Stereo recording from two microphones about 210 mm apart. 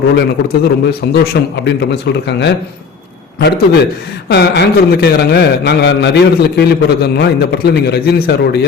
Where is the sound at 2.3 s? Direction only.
55° left (ahead or behind).